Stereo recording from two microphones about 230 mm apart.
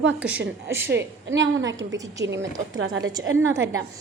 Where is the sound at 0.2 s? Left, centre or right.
Centre.